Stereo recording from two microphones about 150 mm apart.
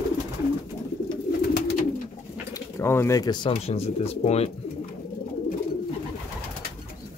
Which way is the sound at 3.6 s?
40° left (ahead or behind).